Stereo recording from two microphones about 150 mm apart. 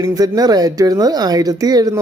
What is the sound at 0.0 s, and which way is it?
Speech, 25° right (ahead or behind).